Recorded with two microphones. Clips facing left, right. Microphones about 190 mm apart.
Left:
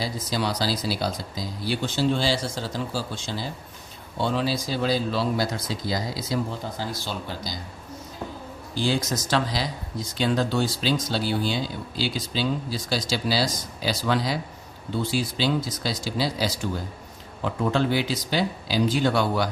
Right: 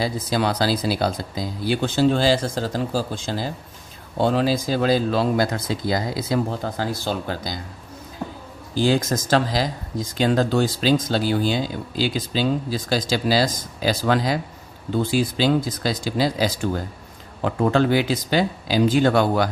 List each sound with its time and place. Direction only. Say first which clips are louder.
0.0 s speech: right 5 dB; 55° right (ahead or behind)
4.2 s speech: right 6 dB; 45° right (ahead or behind)
9.3 s speech: right 5 dB; 45° right (ahead or behind)